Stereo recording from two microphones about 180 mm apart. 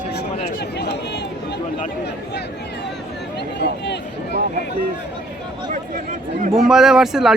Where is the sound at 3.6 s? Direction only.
70° left (ahead or behind).